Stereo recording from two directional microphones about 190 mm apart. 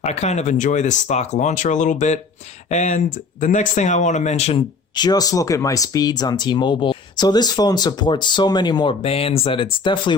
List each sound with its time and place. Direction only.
0.0 s speech: 35° left (ahead or behind)
4.9 s speech: 20° left (ahead or behind)